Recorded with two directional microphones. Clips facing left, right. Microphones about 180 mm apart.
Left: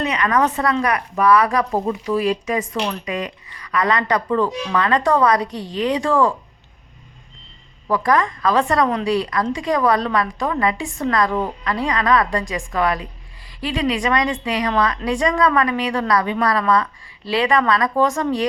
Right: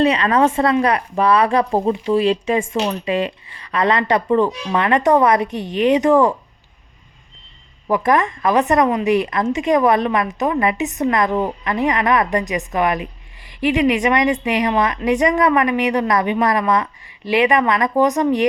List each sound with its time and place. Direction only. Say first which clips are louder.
0.0 s a woman's voice: right 4 dB; 30° right (ahead or behind)
7.9 s a woman's voice: right 2 dB; 20° right (ahead or behind)